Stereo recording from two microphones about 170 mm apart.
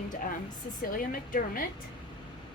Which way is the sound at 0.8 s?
55° left (ahead or behind).